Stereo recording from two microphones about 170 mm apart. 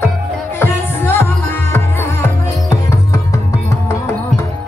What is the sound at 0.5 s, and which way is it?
Music, 15° left (ahead or behind).